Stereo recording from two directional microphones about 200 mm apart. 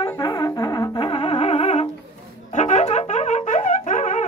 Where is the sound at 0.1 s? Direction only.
20° left (ahead or behind).